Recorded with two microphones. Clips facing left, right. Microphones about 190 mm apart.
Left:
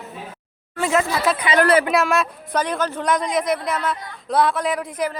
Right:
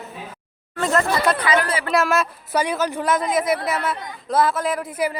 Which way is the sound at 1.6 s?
55° left (ahead or behind).